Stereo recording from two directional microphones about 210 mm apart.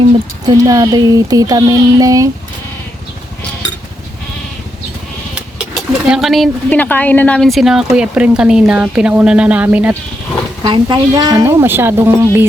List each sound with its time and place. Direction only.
0.4 s music: 15° right (ahead or behind)
6.1 s speech: centre (ahead or behind)
10.6 s music: 20° right (ahead or behind)